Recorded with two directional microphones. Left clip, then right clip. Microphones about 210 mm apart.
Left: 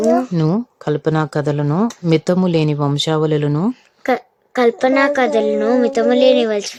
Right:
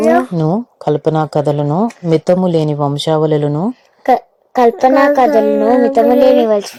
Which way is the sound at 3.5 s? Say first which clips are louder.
Right 2 dB; 20° left (ahead or behind).